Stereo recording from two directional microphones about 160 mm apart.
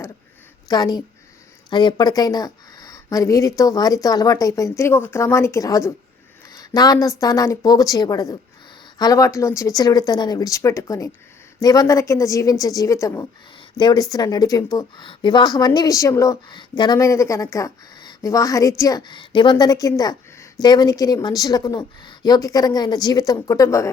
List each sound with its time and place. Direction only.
0.7 s a woman's voice: 25° left (ahead or behind)